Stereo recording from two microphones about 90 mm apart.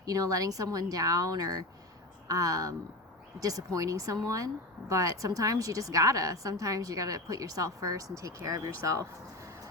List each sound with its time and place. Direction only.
0.0 s a woman's voice: 40° right (ahead or behind)